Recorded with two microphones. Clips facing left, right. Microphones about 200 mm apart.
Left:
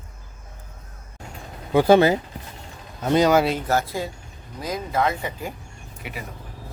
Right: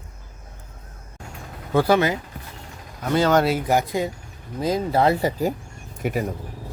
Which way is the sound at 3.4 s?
10° right (ahead or behind).